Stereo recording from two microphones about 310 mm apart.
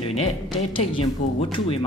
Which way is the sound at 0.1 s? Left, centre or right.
Centre.